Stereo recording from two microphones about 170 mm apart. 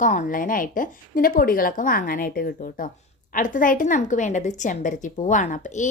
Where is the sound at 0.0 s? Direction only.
50° left (ahead or behind).